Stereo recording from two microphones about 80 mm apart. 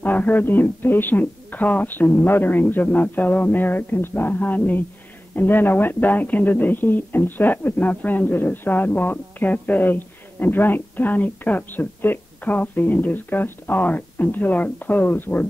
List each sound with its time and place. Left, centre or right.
0.0 s speech: left